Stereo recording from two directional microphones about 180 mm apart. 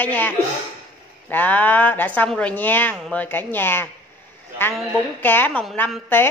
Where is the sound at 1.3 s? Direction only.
10° left (ahead or behind).